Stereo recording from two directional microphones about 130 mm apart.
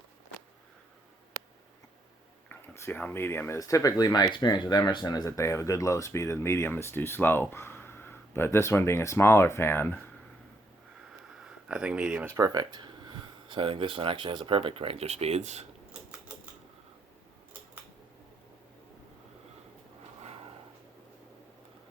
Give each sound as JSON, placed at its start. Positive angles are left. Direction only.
{"t": 2.5, "sound": "speech", "side_deg": 15}
{"t": 11.7, "sound": "speech", "side_deg": -5}
{"t": 12.2, "sound": "speech", "side_deg": -20}
{"t": 12.5, "sound": "speech", "side_deg": -30}